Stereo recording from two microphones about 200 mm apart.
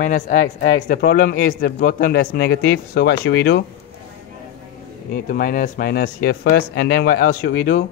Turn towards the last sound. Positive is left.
turn(degrees=50)  # may be behind; listen again after turning